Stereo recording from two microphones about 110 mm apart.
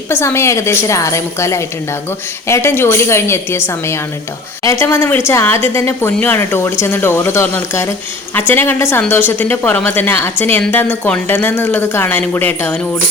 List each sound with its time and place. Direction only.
0.1 s a woman's voice: 20° left (ahead or behind)